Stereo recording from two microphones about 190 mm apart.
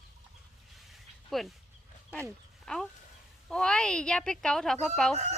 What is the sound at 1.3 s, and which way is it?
Speech, centre (ahead or behind).